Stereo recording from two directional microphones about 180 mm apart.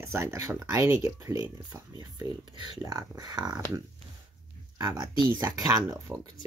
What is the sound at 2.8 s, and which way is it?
Speech, 20° right (ahead or behind).